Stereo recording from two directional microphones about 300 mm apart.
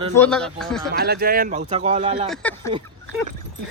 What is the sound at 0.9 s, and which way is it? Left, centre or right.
Speech, right.